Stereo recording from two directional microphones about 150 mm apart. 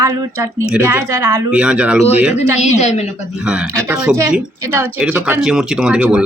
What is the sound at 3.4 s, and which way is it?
Speech, 5° right (ahead or behind).